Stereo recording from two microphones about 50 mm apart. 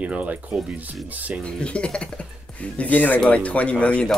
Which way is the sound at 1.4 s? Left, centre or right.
Left.